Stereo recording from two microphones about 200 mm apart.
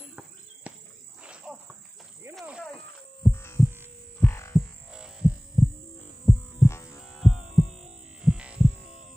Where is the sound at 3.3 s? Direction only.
15° left (ahead or behind).